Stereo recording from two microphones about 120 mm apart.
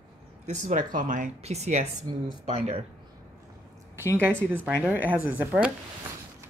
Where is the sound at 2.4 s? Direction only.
60° right (ahead or behind).